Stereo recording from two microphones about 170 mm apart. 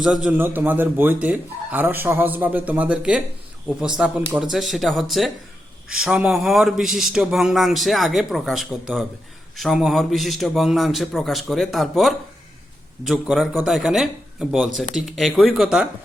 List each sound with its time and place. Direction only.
0.0 s speech: 5° right (ahead or behind)